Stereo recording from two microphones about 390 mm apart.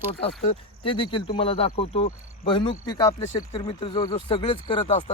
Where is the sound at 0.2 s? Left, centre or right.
Centre.